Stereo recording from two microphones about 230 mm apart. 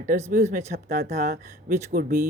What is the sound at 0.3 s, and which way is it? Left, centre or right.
Speech, right.